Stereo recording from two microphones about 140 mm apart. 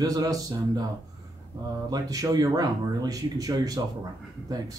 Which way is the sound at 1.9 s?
25° right (ahead or behind).